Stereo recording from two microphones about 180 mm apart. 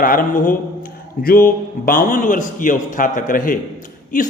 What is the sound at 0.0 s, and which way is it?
A man's voice, 50° left (ahead or behind).